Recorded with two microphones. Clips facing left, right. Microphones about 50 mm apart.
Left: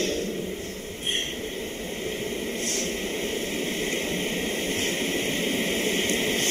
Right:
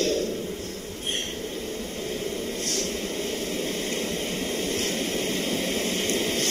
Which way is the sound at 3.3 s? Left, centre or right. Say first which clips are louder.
Even; left.